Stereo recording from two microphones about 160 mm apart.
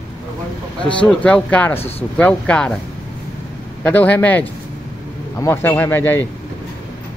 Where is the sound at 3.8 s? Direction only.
10° left (ahead or behind).